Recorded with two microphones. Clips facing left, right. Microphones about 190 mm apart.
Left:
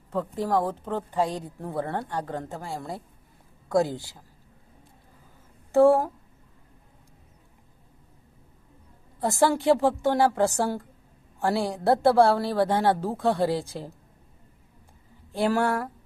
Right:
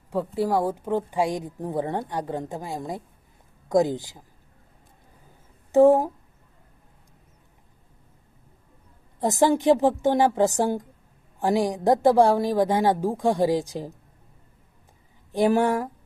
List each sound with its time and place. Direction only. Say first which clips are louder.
0.1 s a woman's voice: right 2 dB; 10° right (ahead or behind)
5.7 s a woman's voice: right 2 dB; 20° right (ahead or behind)
9.2 s a woman's voice: right 2 dB; 20° right (ahead or behind)
15.3 s a woman's voice: right 4 dB; 15° right (ahead or behind)